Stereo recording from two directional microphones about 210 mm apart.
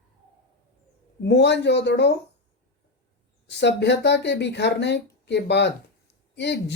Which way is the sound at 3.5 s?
55° left (ahead or behind).